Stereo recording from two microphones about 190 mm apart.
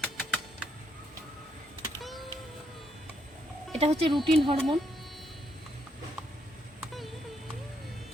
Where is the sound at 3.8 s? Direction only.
30° right (ahead or behind).